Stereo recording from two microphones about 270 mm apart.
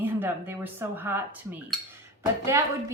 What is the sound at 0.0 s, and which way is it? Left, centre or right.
Speech, centre.